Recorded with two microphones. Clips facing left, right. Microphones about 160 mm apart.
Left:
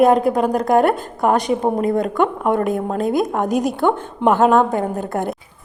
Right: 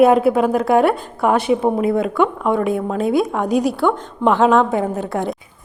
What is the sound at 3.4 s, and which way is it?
Speech, 50° left (ahead or behind).